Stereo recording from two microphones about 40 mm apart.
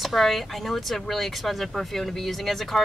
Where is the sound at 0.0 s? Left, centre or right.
Centre.